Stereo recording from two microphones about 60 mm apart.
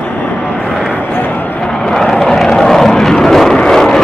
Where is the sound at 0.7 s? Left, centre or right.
Centre.